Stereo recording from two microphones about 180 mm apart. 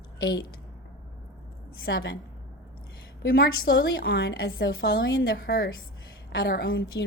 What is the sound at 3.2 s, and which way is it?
A woman's voice, 60° left (ahead or behind).